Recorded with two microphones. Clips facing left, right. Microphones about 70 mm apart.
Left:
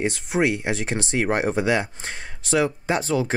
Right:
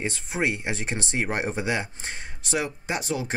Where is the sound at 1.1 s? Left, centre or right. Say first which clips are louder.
Left 5 dB; left.